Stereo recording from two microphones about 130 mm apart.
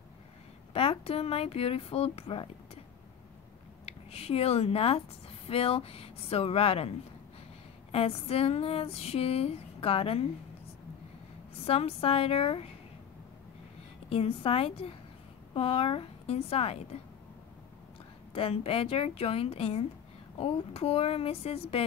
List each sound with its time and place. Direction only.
0.7 s speech: 50° left (ahead or behind)
3.8 s speech: 50° left (ahead or behind)
7.9 s speech: 50° left (ahead or behind)
11.6 s speech: 50° left (ahead or behind)
14.0 s speech: 50° left (ahead or behind)
18.3 s speech: 50° left (ahead or behind)